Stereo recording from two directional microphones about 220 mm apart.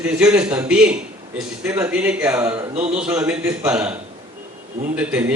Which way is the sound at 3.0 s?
5° right (ahead or behind).